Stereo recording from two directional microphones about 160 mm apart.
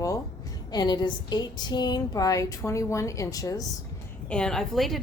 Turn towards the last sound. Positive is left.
turn(degrees=0)  # may be behind; listen again after turning